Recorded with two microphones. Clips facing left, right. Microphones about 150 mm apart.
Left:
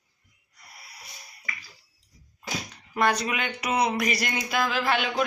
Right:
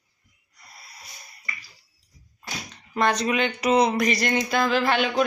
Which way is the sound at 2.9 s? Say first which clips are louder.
Right 2 dB; 10° left (ahead or behind).